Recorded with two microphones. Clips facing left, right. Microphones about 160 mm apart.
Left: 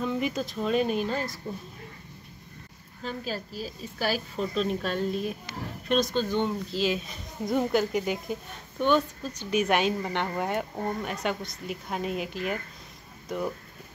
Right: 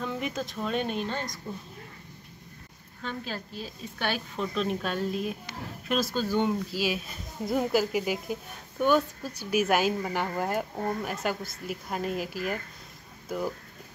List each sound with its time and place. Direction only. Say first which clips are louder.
0.0 s a woman's voice: left 4 dB; centre (ahead or behind)
3.0 s a woman's voice: left 2 dB; 35° left (ahead or behind)
3.6 s a woman's voice: left 2 dB; 5° left (ahead or behind)